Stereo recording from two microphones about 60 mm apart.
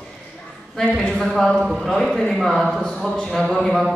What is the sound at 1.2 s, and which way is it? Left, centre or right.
Speech, centre.